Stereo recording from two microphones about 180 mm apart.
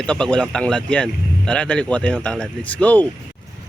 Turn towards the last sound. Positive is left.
turn(degrees=10)  # may be behind; listen again after turning